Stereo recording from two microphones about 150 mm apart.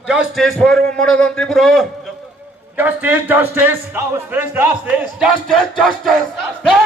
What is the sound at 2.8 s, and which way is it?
A man's voice, 10° right (ahead or behind).